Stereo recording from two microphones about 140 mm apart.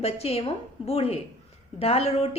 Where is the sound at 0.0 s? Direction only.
45° left (ahead or behind).